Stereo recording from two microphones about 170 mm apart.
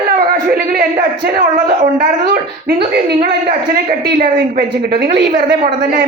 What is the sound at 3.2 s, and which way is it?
Speech, 60° right (ahead or behind).